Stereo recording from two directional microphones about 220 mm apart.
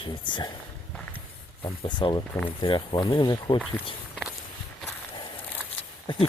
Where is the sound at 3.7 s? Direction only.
Centre (ahead or behind).